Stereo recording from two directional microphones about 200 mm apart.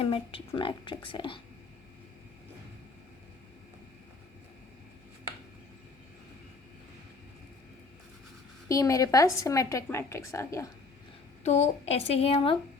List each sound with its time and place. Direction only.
0.0 s speech: 25° left (ahead or behind)
8.7 s a woman's voice: 15° left (ahead or behind)
11.4 s speech: 35° left (ahead or behind)